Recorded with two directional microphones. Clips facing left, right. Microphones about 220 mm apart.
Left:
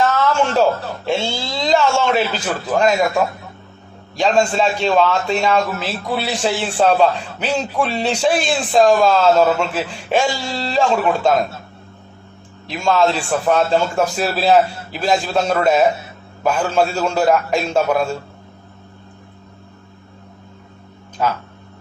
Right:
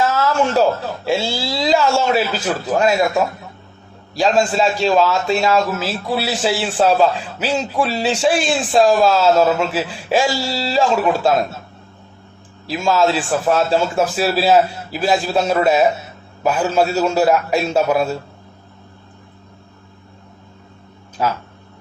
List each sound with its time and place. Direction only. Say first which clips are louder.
0.0 s a sound: left 1 dB; 5° right (ahead or behind)
1.1 s a man's voice: right 1 dB; 5° right (ahead or behind)
4.2 s a man's voice: even; 5° right (ahead or behind)
12.7 s a man's voice: even; centre (ahead or behind)